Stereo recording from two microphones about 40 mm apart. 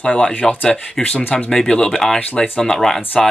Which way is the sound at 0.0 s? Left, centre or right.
Left.